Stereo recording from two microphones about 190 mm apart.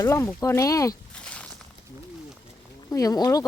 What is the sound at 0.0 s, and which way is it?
Speech, 15° left (ahead or behind).